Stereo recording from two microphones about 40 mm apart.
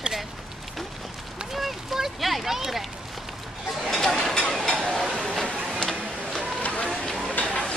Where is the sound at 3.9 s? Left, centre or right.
Centre.